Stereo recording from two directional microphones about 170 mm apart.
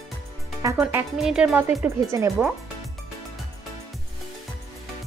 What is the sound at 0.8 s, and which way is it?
Speech, 10° right (ahead or behind).